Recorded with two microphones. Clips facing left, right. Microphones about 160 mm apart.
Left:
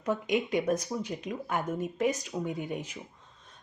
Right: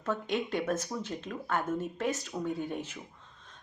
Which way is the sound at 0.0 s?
15° left (ahead or behind).